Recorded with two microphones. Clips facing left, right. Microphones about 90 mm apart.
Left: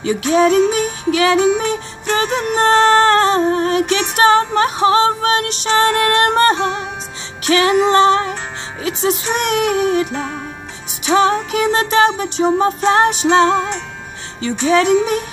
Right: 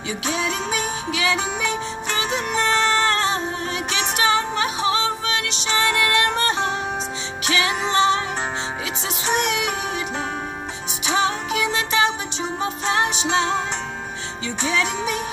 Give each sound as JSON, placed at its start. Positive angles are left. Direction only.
{"t": 0.3, "sound": "music", "side_deg": 45}
{"t": 11.1, "sound": "music", "side_deg": 45}